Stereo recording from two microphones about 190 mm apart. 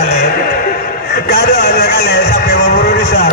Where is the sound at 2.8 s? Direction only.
60° left (ahead or behind).